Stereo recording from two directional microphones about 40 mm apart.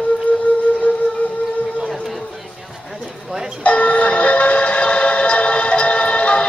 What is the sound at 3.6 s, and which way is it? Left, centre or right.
Music, left.